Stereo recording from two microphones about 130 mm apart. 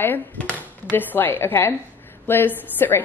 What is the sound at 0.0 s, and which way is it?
Speech, 15° left (ahead or behind).